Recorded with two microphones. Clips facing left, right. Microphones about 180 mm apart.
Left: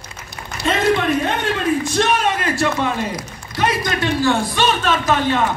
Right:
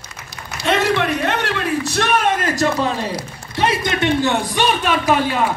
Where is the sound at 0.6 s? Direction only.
70° right (ahead or behind).